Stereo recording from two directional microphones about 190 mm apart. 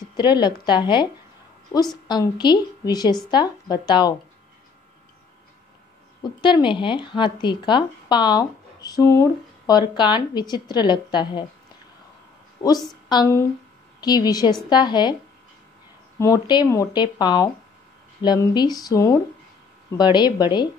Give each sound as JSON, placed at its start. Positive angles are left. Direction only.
{"t": 0.1, "sound": "a woman's voice", "side_deg": 25}
{"t": 6.2, "sound": "a woman's voice", "side_deg": 25}
{"t": 12.6, "sound": "a woman's voice", "side_deg": 20}
{"t": 16.2, "sound": "a woman's voice", "side_deg": 20}